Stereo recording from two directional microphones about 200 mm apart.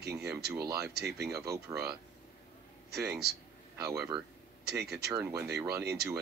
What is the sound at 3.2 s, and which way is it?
Speech, 55° right (ahead or behind).